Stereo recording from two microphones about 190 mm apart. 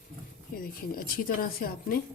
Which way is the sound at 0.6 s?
50° left (ahead or behind).